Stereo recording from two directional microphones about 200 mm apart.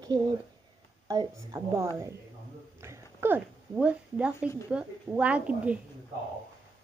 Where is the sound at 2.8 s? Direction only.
15° right (ahead or behind).